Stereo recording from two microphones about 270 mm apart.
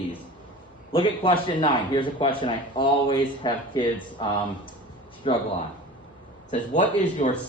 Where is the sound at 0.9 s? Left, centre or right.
Centre.